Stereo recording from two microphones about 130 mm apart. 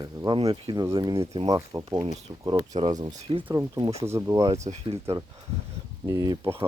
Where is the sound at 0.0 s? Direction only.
35° right (ahead or behind).